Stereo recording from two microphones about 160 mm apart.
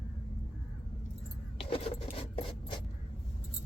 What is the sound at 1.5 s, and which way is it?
A woman's voice, 35° left (ahead or behind).